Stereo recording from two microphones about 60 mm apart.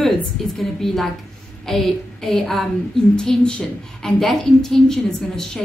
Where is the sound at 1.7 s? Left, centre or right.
Centre.